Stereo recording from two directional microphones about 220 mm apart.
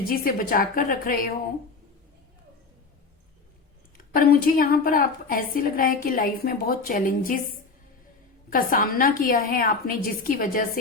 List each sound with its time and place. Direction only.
0.1 s a woman's voice: 40° left (ahead or behind)
3.9 s a woman's voice: 40° left (ahead or behind)
8.4 s a woman's voice: 40° left (ahead or behind)